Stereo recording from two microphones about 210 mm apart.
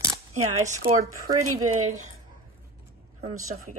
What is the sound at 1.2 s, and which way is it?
Speech, 90° right.